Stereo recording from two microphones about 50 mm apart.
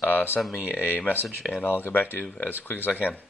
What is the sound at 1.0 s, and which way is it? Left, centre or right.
Speech, left.